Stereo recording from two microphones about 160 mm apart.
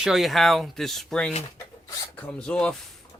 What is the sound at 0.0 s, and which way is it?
Speech, centre (ahead or behind).